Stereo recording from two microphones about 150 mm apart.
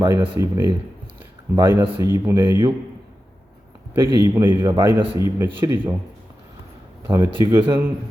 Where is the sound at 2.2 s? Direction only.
15° right (ahead or behind).